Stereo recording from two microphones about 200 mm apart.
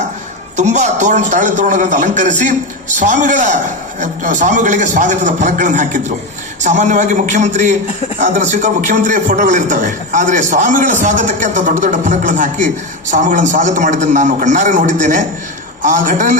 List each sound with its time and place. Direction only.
0.5 s a man's voice: 35° right (ahead or behind)